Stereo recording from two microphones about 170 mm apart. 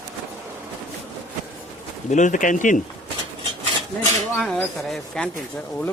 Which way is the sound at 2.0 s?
45° left (ahead or behind).